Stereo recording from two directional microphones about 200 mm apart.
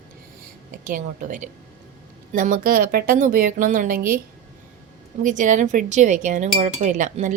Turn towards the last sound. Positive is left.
turn(degrees=-40)  # may be behind; listen again after turning